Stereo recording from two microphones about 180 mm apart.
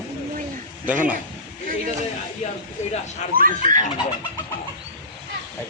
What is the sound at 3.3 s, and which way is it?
Speech, 50° right (ahead or behind).